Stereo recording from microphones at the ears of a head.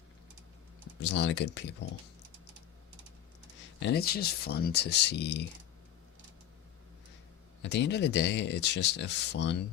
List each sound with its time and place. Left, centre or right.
0.9 s speech: left
2.3 s typing: right
3.5 s speech: left
7.6 s speech: left